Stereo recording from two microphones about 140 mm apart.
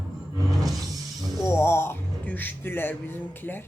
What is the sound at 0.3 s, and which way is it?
Music, 25° right (ahead or behind).